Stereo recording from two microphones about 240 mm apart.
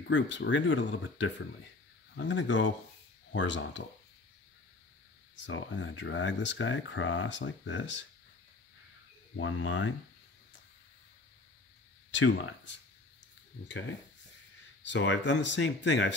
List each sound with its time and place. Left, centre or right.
0.1 s speech: left
5.3 s speech: left
9.4 s speech: left
12.1 s speech: left